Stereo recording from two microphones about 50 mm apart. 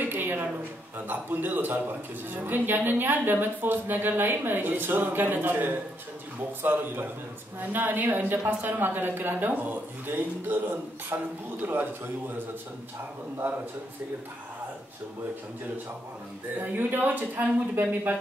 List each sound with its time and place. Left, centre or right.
0.0 s a sound: right
0.9 s a man's voice: right
16.7 s a woman's voice: right